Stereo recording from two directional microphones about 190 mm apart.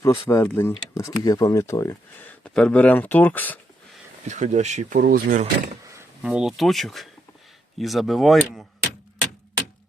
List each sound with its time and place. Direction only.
0.0 s speech: 15° left (ahead or behind)
2.4 s speech: 5° left (ahead or behind)
4.3 s speech: 40° right (ahead or behind)
6.2 s speech: 5° right (ahead or behind)